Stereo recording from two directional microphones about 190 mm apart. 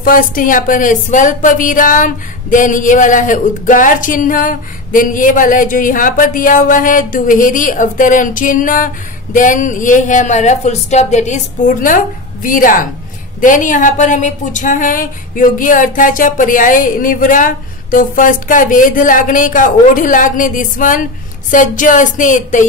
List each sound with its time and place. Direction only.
0.0 s speech: 45° left (ahead or behind)